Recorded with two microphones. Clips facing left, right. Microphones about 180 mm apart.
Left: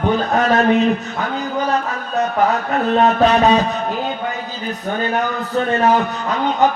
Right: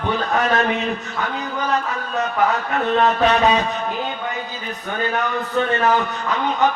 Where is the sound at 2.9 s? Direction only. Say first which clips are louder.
Left 3 dB; 35° left (ahead or behind).